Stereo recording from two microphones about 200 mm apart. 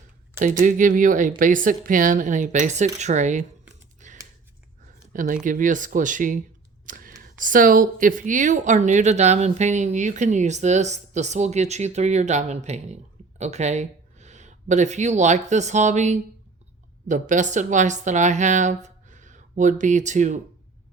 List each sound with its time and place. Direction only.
0.6 s speech: 40° right (ahead or behind)
4.0 s computer keyboard: 40° right (ahead or behind)
5.1 s speech: 40° right (ahead or behind)
6.8 s whispering: 45° right (ahead or behind)
7.3 s speech: 40° right (ahead or behind)